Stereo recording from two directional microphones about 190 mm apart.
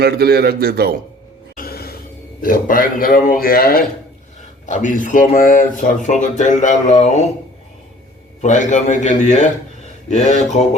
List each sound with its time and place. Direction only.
0.0 s speech: 55° right (ahead or behind)
1.5 s music: 50° left (ahead or behind)
2.4 s speech: 45° left (ahead or behind)
4.6 s speech: 40° left (ahead or behind)
8.4 s speech: 40° left (ahead or behind)